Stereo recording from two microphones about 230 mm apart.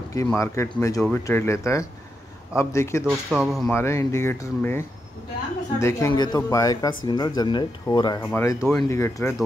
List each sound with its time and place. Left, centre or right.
0.1 s speech: centre
3.1 s speech: centre
3.7 s speech: centre